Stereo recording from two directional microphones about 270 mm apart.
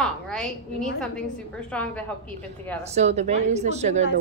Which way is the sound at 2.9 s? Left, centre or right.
Right.